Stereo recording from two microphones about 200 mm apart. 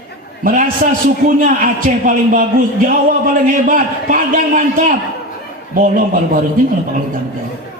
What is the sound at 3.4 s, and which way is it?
A man's voice, 40° right (ahead or behind).